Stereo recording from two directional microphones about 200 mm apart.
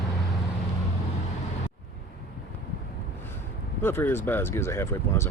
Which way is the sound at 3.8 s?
10° left (ahead or behind).